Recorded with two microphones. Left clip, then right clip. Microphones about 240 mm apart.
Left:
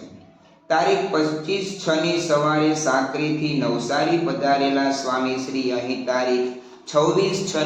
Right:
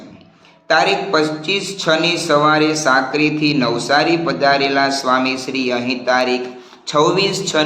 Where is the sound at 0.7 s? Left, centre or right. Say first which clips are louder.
Right 5 dB; right.